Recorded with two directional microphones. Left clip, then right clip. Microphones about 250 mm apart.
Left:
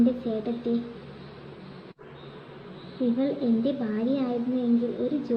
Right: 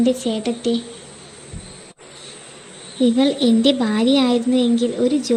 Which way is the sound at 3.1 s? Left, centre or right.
Right.